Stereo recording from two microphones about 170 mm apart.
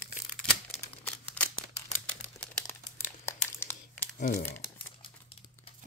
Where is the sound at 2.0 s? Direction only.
10° left (ahead or behind).